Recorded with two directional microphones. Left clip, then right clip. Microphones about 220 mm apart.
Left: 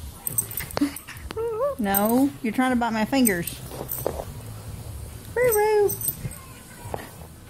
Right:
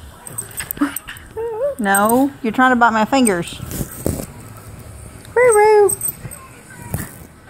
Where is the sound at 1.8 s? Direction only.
Centre (ahead or behind).